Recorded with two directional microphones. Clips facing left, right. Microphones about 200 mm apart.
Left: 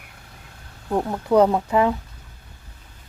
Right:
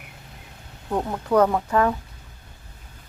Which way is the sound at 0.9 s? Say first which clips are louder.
Left 2 dB; 10° left (ahead or behind).